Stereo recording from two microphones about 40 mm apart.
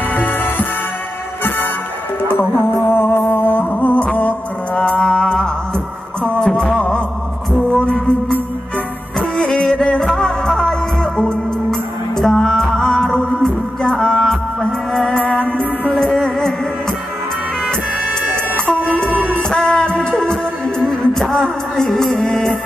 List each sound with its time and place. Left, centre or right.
0.1 s music: left
2.2 s music: left
3.7 s music: left
7.7 s music: left
9.4 s music: left
15.1 s music: left
15.9 s music: centre
18.7 s music: left